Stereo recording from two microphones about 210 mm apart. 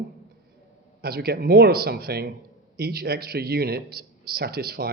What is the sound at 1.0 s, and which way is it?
A man's voice, 50° right (ahead or behind).